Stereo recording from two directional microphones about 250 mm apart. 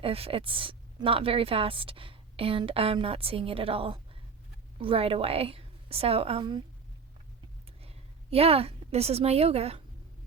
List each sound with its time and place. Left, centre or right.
0.0 s a woman's voice: right
7.8 s a woman's voice: right